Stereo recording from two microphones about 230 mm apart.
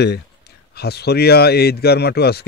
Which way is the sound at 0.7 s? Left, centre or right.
Left.